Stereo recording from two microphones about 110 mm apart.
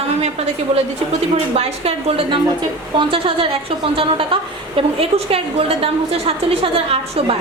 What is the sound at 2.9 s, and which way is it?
A woman's voice, 50° right (ahead or behind).